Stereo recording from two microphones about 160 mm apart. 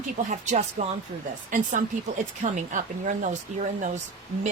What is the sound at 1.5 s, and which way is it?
Speech, 55° right (ahead or behind).